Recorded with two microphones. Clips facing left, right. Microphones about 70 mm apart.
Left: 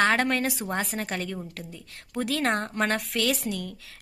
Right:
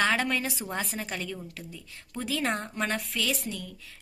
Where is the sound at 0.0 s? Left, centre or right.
Left.